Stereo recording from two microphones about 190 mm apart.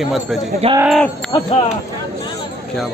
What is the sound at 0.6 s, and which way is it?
Speech, 30° right (ahead or behind).